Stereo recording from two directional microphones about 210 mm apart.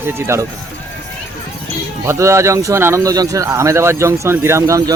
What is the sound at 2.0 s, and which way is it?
Speech, 15° right (ahead or behind).